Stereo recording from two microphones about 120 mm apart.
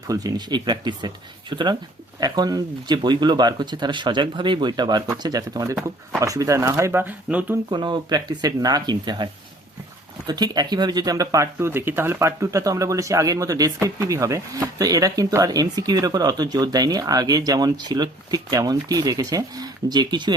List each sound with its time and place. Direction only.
0.1 s speech: 35° right (ahead or behind)
7.0 s speech: 15° right (ahead or behind)
7.7 s speech: 40° right (ahead or behind)